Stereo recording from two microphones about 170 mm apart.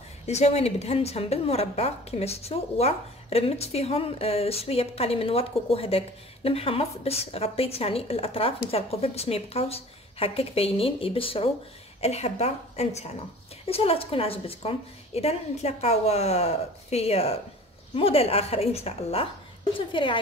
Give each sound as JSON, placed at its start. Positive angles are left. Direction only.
{"t": 0.3, "sound": "a woman's voice", "side_deg": 40}